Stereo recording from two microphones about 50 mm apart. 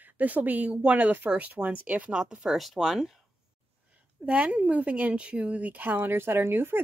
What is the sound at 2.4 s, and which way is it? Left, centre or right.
Speech, centre.